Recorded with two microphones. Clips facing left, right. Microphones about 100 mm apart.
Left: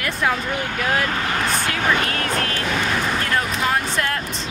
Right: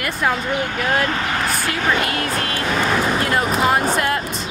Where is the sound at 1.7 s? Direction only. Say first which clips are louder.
Right 3 dB; 5° right (ahead or behind).